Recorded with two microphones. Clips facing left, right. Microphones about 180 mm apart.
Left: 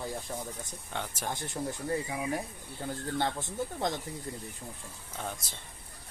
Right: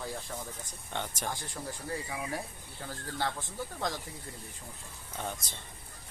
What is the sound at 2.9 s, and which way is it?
Speech, 20° left (ahead or behind).